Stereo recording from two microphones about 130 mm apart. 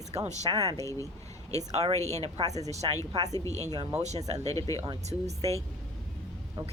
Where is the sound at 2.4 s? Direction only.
25° right (ahead or behind).